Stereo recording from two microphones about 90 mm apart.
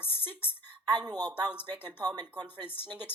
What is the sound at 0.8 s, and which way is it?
Speech, 50° right (ahead or behind).